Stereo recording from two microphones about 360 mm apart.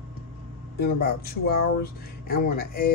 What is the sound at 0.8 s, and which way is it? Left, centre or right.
Speech, left.